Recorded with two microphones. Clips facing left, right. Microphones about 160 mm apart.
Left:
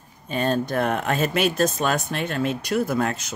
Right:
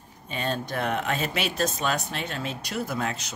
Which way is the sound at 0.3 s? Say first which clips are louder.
Left 7 dB; 45° left (ahead or behind).